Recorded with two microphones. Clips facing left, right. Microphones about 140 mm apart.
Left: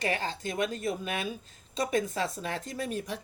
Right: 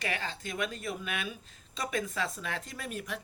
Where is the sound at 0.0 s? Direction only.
35° left (ahead or behind).